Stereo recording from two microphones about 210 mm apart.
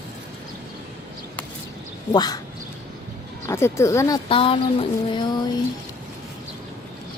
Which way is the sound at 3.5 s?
10° left (ahead or behind).